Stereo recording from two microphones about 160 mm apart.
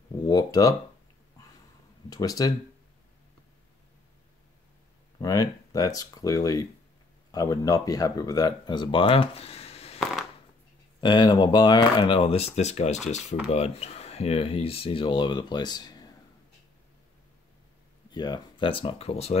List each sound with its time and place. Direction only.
0.3 s speech: 25° left (ahead or behind)
2.0 s speech: 25° left (ahead or behind)
5.2 s speech: 20° left (ahead or behind); by 9.9 s 40° left (ahead or behind)
11.0 s speech: 30° left (ahead or behind)
18.1 s speech: 25° left (ahead or behind)